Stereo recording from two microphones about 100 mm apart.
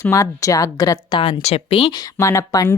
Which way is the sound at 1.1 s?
60° left (ahead or behind).